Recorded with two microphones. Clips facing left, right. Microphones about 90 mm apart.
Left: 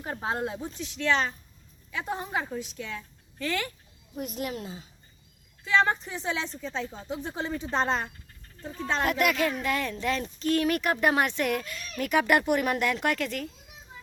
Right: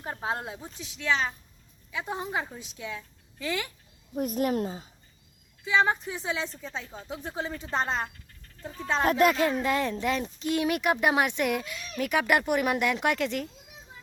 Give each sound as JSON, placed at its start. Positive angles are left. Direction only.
{"t": 0.0, "sound": "speech", "side_deg": -5}
{"t": 4.1, "sound": "speech", "side_deg": -40}
{"t": 5.6, "sound": "speech", "side_deg": -10}
{"t": 9.0, "sound": "speech", "side_deg": -30}